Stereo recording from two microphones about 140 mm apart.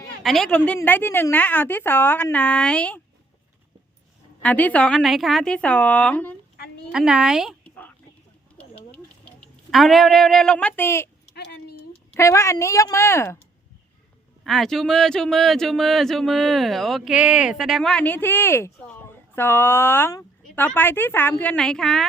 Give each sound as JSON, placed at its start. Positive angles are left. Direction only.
{"t": 0.2, "sound": "a man's voice", "side_deg": 0}
{"t": 4.4, "sound": "a woman's voice", "side_deg": 10}
{"t": 6.9, "sound": "a man's voice", "side_deg": -5}
{"t": 8.5, "sound": "a sound", "side_deg": 10}
{"t": 12.1, "sound": "a woman's voice", "side_deg": 20}
{"t": 14.4, "sound": "a man's voice", "side_deg": 0}